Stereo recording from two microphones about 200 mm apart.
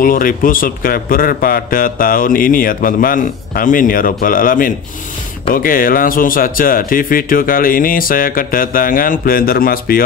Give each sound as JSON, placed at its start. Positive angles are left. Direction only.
{"t": 0.0, "sound": "a man's voice", "side_deg": 45}